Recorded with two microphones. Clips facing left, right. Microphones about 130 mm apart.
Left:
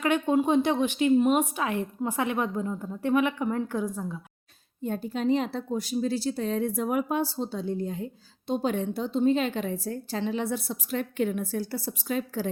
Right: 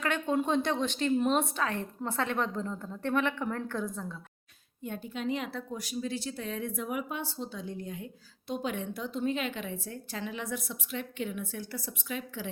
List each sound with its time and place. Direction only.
0.0 s a woman's voice: 15° left (ahead or behind)
4.8 s a woman's voice: 35° left (ahead or behind)